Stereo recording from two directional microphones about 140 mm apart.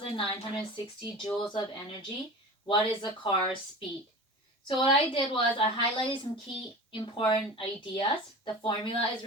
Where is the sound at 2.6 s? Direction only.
35° left (ahead or behind).